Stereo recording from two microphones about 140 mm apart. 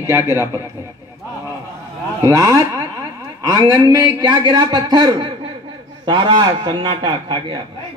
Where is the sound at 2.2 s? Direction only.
25° right (ahead or behind).